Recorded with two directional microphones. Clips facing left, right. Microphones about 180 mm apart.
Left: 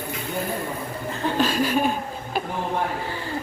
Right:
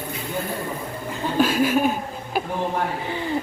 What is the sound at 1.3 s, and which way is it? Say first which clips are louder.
Chuckle: right 4 dB; 10° right (ahead or behind).